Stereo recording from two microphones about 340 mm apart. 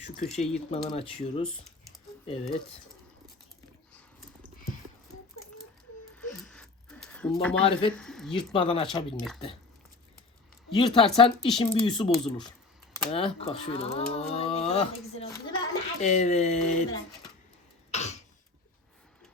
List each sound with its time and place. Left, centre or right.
0.3 s speech: centre
1.5 s typing: centre
2.4 s speech: centre
6.1 s a sound: centre
7.6 s speech: centre
7.9 s speech: centre
8.5 s speech: centre
10.7 s speech: centre
17.9 s cough: centre